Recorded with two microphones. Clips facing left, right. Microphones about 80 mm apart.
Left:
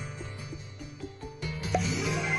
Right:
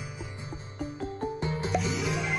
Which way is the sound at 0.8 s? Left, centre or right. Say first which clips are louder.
Right 12 dB; right.